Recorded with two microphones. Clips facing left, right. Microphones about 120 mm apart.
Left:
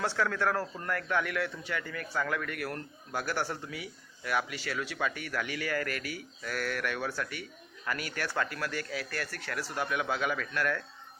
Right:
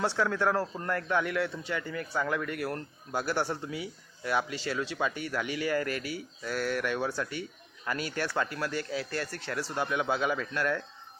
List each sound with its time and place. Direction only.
0.0 s a man's voice: 20° right (ahead or behind)